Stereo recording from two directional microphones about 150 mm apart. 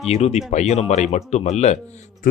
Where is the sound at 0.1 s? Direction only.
45° left (ahead or behind).